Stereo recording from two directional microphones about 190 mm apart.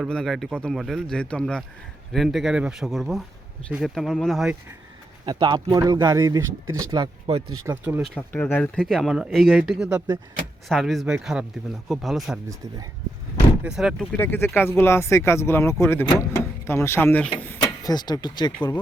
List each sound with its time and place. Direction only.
0.0 s speech: centre (ahead or behind)
5.2 s speech: 25° right (ahead or behind)
7.7 s speech: 10° right (ahead or behind)
8.1 s speech: 10° left (ahead or behind)
12.5 s speech: 20° right (ahead or behind)
13.7 s speech: centre (ahead or behind)
14.2 s speech: 10° left (ahead or behind)